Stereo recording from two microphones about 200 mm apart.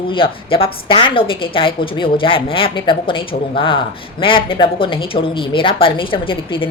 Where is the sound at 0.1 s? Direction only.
25° left (ahead or behind).